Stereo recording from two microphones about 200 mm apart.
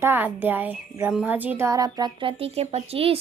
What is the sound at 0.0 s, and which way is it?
Speech, 10° right (ahead or behind).